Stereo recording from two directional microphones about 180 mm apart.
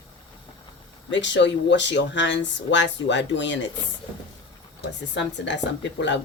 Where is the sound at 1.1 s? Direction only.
85° left.